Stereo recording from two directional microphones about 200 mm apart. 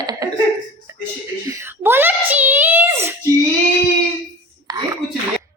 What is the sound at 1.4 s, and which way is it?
A woman's voice, 15° right (ahead or behind).